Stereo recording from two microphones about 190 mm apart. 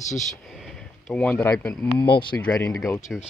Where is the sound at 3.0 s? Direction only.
Centre (ahead or behind).